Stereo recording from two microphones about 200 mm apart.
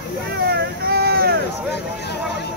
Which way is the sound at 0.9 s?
50° right (ahead or behind).